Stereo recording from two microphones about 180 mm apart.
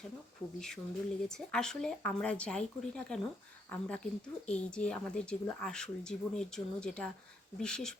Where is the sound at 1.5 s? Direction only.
5° left (ahead or behind).